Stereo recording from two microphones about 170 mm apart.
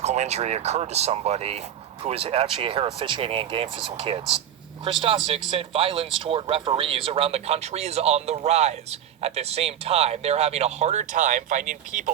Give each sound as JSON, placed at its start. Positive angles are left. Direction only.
{"t": 0.0, "sound": "speech", "side_deg": -40}